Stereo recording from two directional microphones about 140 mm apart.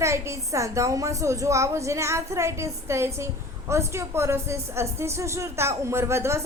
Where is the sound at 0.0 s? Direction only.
20° right (ahead or behind).